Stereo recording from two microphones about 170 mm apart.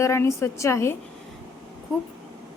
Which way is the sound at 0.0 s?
15° left (ahead or behind).